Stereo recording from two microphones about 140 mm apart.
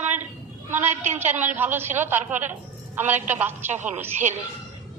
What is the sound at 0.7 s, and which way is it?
A woman's voice, 15° right (ahead or behind).